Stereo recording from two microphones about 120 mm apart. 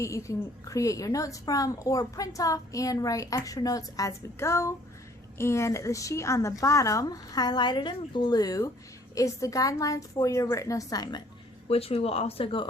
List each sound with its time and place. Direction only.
0.0 s a woman's voice: 25° left (ahead or behind)
11.7 s speech: 55° left (ahead or behind)